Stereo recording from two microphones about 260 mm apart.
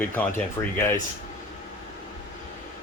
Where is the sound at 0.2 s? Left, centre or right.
Centre.